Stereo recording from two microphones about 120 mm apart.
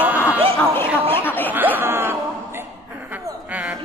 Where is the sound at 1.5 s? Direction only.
15° right (ahead or behind).